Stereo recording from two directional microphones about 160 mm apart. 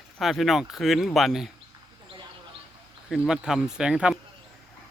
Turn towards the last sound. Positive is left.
turn(degrees=-5)  # may be behind; listen again after turning